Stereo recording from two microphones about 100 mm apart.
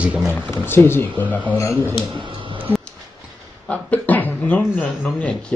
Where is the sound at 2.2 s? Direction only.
55° right (ahead or behind).